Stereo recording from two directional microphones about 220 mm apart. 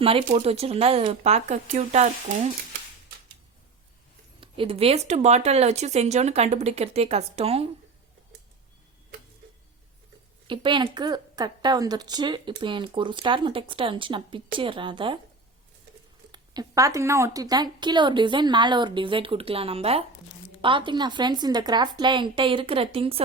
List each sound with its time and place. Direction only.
0.0 s a woman's voice: 25° right (ahead or behind)
4.4 s a woman's voice: 25° right (ahead or behind)
10.4 s a woman's voice: 20° right (ahead or behind)
16.3 s a woman's voice: 15° right (ahead or behind)